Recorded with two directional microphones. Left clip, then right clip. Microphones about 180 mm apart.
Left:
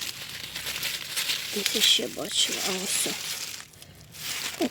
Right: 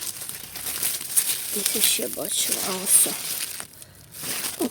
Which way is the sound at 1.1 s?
45° right (ahead or behind).